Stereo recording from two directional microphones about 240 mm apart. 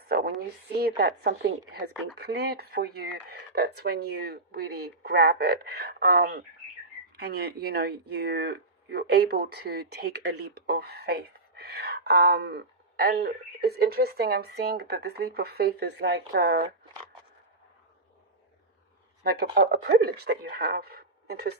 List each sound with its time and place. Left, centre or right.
0.1 s speech: right
19.2 s speech: right